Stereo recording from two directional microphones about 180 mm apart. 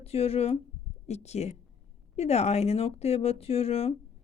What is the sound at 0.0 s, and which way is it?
A woman's voice, 35° left (ahead or behind).